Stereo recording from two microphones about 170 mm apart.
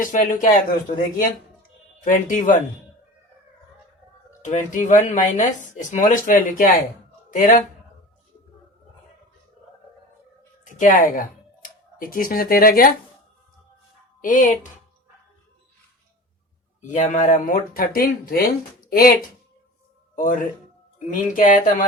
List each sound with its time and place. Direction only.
0.0 s speech: 50° left (ahead or behind)
4.3 s speech: 50° left (ahead or behind)
10.6 s speech: 50° left (ahead or behind)
14.2 s speech: 50° left (ahead or behind)
16.8 s speech: 45° left (ahead or behind)